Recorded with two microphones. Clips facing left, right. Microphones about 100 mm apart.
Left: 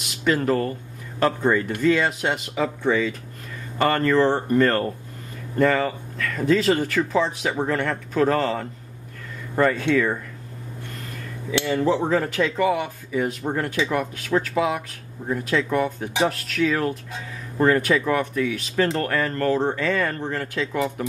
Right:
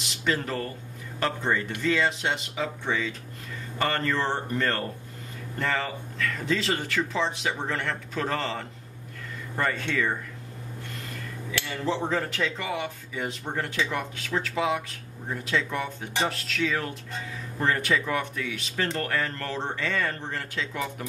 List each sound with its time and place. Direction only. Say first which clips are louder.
0.2 s speech: left 8 dB; 45° left (ahead or behind)
9.6 s speech: left 8 dB; 60° left (ahead or behind)
11.7 s speech: left 7 dB; 50° left (ahead or behind)